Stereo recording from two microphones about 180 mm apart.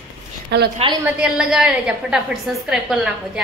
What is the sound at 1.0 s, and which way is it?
A woman's voice, 5° right (ahead or behind).